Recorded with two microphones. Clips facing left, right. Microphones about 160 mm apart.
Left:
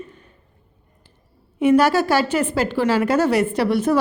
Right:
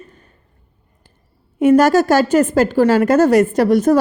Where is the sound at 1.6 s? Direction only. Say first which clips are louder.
Right 4 dB; 45° right (ahead or behind).